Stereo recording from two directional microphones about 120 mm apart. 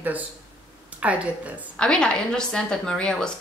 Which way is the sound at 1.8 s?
5° left (ahead or behind).